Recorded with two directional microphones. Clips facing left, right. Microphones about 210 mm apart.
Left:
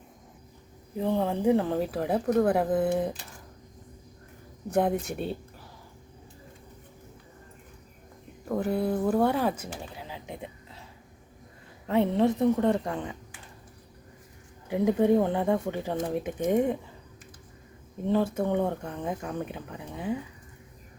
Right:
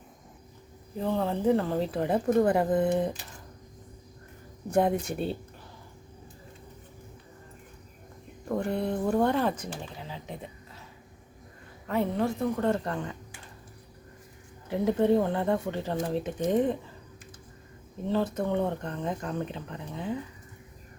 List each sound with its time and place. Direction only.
0.9 s speech: 15° left (ahead or behind)
4.7 s speech: centre (ahead or behind)
8.4 s speech: 5° left (ahead or behind)
10.1 s a sound: 15° left (ahead or behind)
11.9 s a woman's voice: 25° left (ahead or behind)
14.7 s speech: 15° left (ahead or behind)
18.1 s speech: 10° left (ahead or behind)